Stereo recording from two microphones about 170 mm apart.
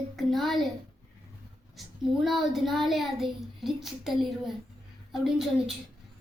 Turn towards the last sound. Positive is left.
turn(degrees=0)  # may be behind; listen again after turning